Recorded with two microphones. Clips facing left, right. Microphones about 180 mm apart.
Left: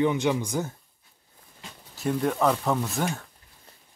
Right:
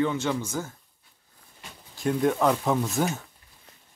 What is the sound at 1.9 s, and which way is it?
Speech, 5° left (ahead or behind).